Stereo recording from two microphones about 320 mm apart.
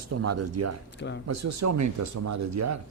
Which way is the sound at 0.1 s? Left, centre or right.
Right.